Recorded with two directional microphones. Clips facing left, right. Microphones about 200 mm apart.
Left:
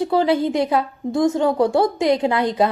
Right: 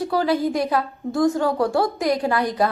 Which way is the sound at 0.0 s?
25° left (ahead or behind).